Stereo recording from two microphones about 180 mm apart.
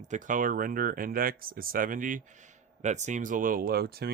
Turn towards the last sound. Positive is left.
turn(degrees=-60)  # may be behind; listen again after turning